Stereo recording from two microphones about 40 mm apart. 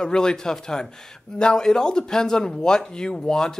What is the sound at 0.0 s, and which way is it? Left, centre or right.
Speech, centre.